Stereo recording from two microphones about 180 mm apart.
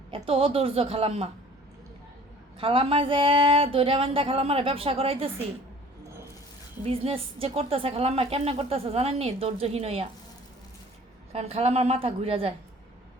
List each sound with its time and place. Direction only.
0.1 s a woman's voice: 30° right (ahead or behind)
2.6 s a woman's voice: 30° right (ahead or behind)
6.8 s a woman's voice: 30° right (ahead or behind)
11.3 s a woman's voice: 35° right (ahead or behind)